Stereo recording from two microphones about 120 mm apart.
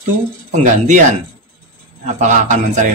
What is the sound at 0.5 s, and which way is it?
Speech, 90° right.